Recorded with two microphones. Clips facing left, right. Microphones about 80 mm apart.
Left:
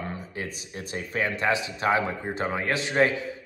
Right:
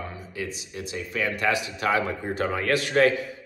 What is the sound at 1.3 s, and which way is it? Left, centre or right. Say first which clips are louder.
A man's voice: even; left.